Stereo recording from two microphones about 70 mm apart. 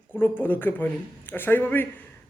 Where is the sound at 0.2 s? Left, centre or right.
Left.